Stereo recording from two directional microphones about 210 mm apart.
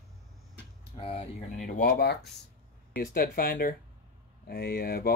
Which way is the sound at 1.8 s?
45° left (ahead or behind).